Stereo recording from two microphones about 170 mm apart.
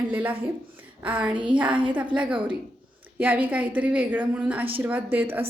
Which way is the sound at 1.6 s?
30° right (ahead or behind).